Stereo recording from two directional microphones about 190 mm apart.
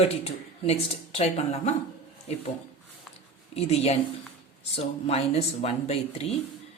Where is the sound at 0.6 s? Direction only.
30° left (ahead or behind).